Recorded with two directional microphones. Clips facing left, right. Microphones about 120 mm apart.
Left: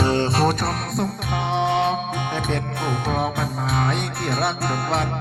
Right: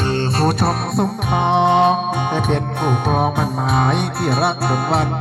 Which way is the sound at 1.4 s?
70° right (ahead or behind).